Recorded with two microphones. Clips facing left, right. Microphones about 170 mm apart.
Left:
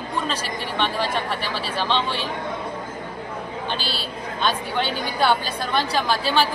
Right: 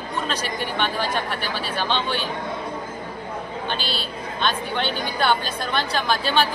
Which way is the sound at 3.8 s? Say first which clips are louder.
Right 1 dB; 35° left (ahead or behind).